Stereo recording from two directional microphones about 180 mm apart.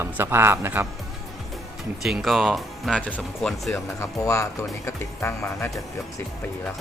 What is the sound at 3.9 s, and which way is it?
Speech, 15° left (ahead or behind).